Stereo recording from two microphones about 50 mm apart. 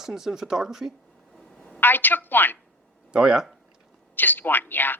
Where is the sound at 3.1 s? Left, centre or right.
Centre.